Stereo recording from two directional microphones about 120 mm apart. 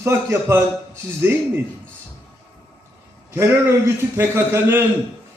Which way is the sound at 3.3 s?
20° right (ahead or behind).